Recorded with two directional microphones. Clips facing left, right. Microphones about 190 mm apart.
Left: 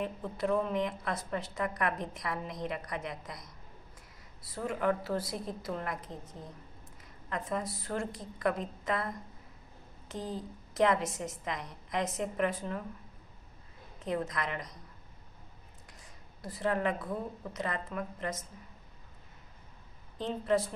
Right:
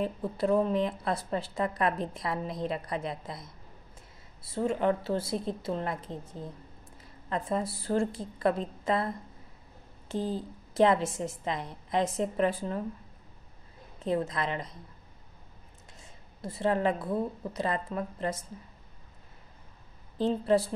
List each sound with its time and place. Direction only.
0.0 s a woman's voice: 30° right (ahead or behind)
14.0 s a woman's voice: 30° right (ahead or behind)
16.0 s a woman's voice: 25° right (ahead or behind)
20.2 s a woman's voice: 30° right (ahead or behind)